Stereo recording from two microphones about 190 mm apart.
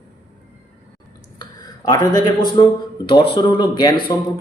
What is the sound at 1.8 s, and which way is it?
Speech, 20° left (ahead or behind).